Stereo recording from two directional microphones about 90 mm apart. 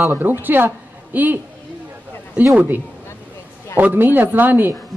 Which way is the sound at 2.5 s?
20° right (ahead or behind).